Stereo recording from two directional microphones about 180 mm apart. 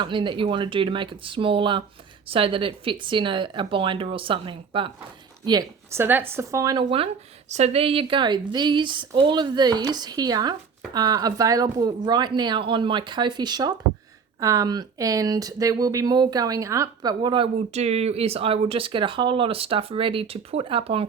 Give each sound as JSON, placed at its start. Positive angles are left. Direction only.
{"t": 0.0, "sound": "speech", "side_deg": -25}
{"t": 5.5, "sound": "speech", "side_deg": -20}